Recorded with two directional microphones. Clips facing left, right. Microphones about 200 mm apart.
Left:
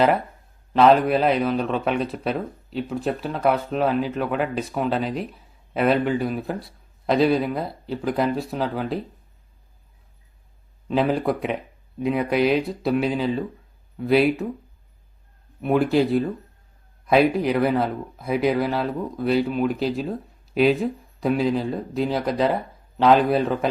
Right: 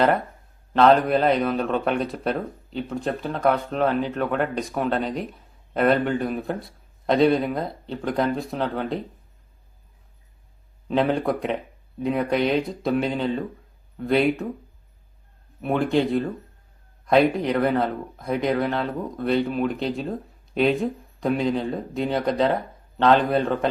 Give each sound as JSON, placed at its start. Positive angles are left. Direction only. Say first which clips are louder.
{"t": 0.7, "sound": "speech", "louder": "left 1 dB", "side_deg": 5}
{"t": 10.8, "sound": "speech", "louder": "left 1 dB", "side_deg": 0}
{"t": 15.6, "sound": "speech", "louder": "left 2 dB", "side_deg": 5}